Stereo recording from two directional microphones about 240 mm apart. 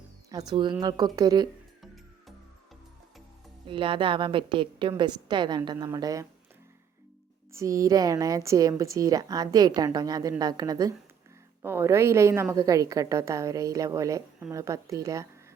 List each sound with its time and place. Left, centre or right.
0.3 s a woman's voice: centre
3.7 s a woman's voice: right
7.5 s a woman's voice: centre